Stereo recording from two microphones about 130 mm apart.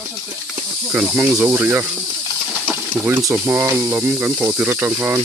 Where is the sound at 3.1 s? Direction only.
20° right (ahead or behind).